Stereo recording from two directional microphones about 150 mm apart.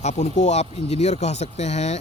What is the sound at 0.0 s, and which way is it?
Speech, 50° left (ahead or behind).